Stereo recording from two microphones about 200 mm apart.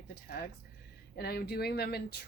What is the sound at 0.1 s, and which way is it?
Speech, 55° left (ahead or behind).